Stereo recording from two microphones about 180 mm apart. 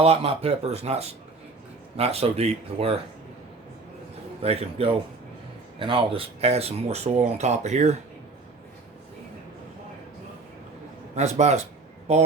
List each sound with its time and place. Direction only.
0.0 s speech: 35° right (ahead or behind)
4.4 s speech: 30° right (ahead or behind)
11.1 s speech: 40° right (ahead or behind)